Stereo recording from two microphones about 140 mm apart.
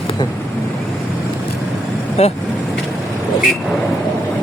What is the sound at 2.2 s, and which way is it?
Speech, 50° left (ahead or behind).